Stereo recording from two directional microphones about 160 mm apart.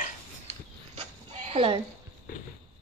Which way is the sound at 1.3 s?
35° right (ahead or behind).